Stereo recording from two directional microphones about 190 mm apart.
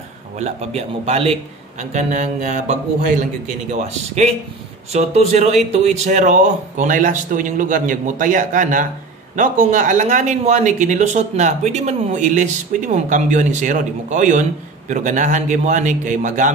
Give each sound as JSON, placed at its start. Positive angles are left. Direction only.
{"t": 0.4, "sound": "speech", "side_deg": -35}